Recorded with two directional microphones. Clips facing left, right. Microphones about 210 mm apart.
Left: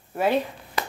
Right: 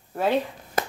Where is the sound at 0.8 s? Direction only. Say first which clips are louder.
Right 3 dB; 45° right (ahead or behind).